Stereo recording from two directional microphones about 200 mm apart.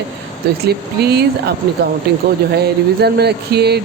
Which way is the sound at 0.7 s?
55° right (ahead or behind).